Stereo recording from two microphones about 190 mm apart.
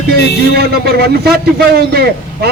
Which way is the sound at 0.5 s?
55° right (ahead or behind).